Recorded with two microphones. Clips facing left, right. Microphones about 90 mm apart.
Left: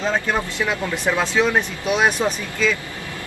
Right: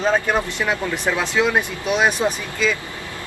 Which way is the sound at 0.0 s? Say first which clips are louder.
Right 3 dB; 15° right (ahead or behind).